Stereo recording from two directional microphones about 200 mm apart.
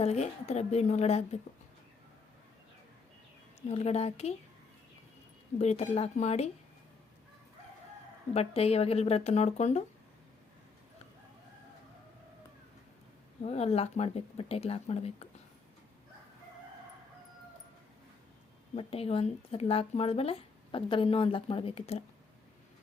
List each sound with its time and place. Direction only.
0.0 s speech: 35° left (ahead or behind)
3.7 s speech: 30° left (ahead or behind)
5.5 s speech: 35° left (ahead or behind)
8.3 s speech: 30° left (ahead or behind)
13.4 s speech: 30° left (ahead or behind)
18.8 s speech: 30° left (ahead or behind)